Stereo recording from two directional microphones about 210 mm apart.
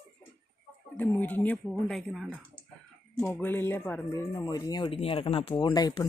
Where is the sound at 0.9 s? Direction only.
10° left (ahead or behind).